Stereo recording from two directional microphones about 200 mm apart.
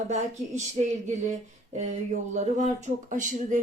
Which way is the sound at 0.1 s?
35° right (ahead or behind).